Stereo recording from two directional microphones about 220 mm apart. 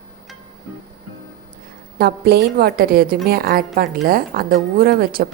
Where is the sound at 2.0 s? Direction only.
45° right (ahead or behind).